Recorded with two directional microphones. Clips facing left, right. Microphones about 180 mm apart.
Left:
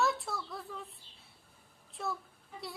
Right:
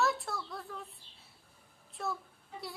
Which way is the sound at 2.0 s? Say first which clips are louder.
Even; centre (ahead or behind).